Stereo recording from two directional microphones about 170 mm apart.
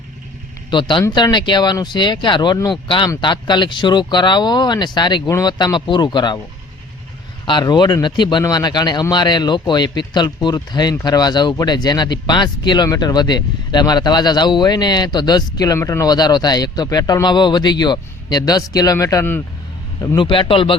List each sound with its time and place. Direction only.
0.7 s speech: 25° left (ahead or behind)
7.4 s speech: 25° left (ahead or behind)